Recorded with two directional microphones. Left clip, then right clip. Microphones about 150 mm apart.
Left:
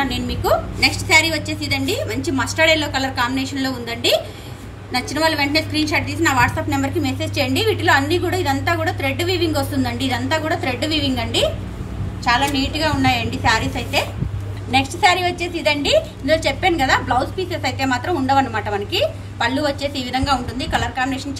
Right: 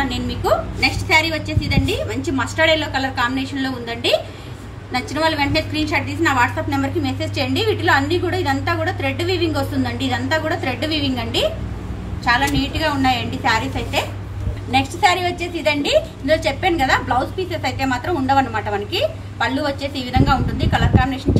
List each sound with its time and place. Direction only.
0.0 s a woman's voice: 15° left (ahead or behind)